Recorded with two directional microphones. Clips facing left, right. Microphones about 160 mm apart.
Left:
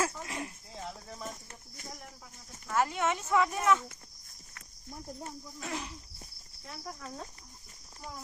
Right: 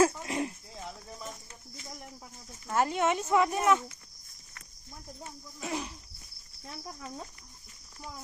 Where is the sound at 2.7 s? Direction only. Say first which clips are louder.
Right 2 dB; 20° right (ahead or behind).